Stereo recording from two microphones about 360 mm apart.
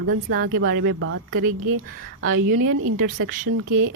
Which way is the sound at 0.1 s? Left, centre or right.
Right.